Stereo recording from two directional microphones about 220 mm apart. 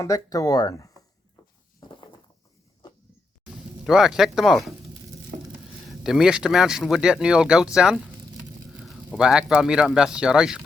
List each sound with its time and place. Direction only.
0.0 s speech: 15° left (ahead or behind)
3.4 s speech: centre (ahead or behind)
5.9 s speech: centre (ahead or behind)